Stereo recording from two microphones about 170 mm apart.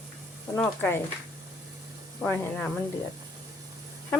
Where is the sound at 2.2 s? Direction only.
10° left (ahead or behind).